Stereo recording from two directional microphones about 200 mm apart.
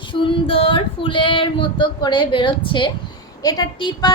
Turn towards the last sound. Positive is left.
turn(degrees=20)  # may be behind; listen again after turning